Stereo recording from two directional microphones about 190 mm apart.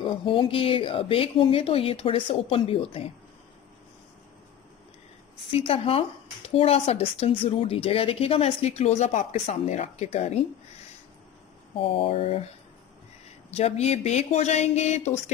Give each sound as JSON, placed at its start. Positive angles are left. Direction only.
{"t": 0.0, "sound": "speech", "side_deg": 25}
{"t": 5.6, "sound": "speech", "side_deg": 30}
{"t": 11.7, "sound": "speech", "side_deg": 30}
{"t": 13.5, "sound": "speech", "side_deg": 35}